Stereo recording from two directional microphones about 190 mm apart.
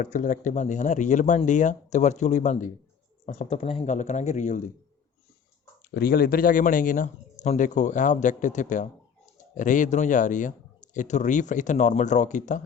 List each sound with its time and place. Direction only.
0.0 s speech: 40° left (ahead or behind)
5.8 s speech: 50° left (ahead or behind)